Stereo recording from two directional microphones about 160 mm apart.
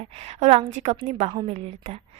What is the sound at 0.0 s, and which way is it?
A woman's voice, 40° right (ahead or behind).